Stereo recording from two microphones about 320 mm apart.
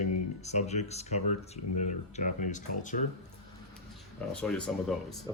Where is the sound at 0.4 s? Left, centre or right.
Left.